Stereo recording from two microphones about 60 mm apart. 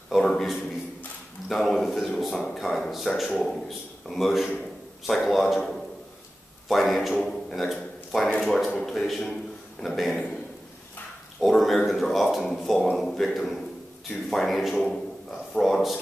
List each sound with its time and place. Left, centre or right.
0.1 s a sound: centre
1.5 s a man's voice: centre
8.3 s speech: centre
8.7 s a man's voice: centre
9.3 s a sound: centre
9.9 s a man's voice: centre
11.4 s a man's voice: centre